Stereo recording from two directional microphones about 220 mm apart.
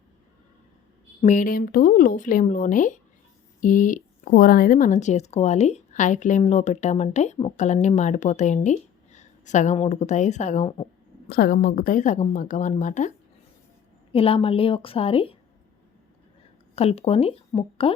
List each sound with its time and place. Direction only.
1.2 s speech: 35° left (ahead or behind)
11.3 s a woman's voice: 45° left (ahead or behind); by 15.4 s 25° left (ahead or behind)
16.7 s a woman's voice: 30° left (ahead or behind)